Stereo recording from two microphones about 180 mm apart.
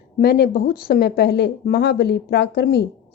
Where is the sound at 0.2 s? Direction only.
60° left (ahead or behind).